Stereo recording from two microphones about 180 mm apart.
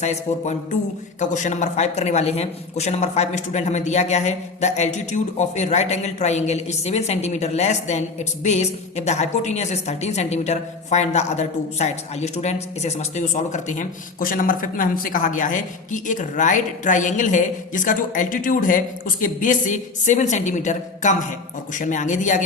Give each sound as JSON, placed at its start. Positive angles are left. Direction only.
{"t": 0.0, "sound": "a man's voice", "side_deg": 40}